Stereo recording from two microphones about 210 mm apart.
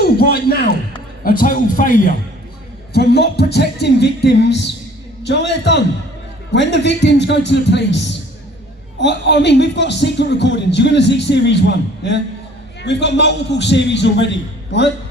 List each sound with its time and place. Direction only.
0.0 s a man's voice: 45° left (ahead or behind)